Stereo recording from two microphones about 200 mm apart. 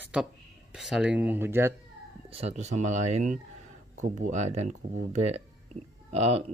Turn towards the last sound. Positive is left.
turn(degrees=-30)  # may be behind; listen again after turning